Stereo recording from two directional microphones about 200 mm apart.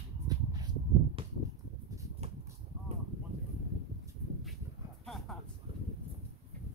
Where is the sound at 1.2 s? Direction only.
25° right (ahead or behind).